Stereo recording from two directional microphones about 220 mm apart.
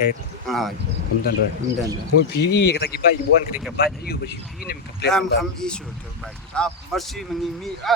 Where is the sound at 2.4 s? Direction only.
50° left (ahead or behind).